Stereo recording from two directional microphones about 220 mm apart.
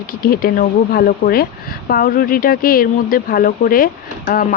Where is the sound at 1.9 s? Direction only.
40° left (ahead or behind).